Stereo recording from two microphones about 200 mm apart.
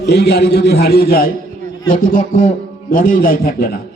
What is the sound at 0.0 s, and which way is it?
A man's voice, 55° left (ahead or behind).